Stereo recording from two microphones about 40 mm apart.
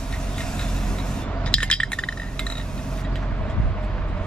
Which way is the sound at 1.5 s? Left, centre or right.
Left.